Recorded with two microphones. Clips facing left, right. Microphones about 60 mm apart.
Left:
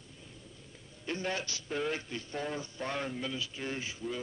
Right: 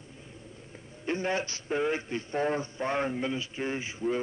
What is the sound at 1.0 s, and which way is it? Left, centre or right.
Speech, right.